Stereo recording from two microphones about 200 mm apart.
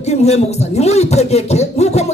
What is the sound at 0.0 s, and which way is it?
Speech, 35° left (ahead or behind).